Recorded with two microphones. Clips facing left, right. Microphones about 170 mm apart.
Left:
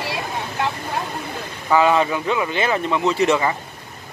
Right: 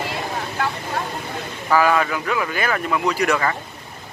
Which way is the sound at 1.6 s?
20° left (ahead or behind).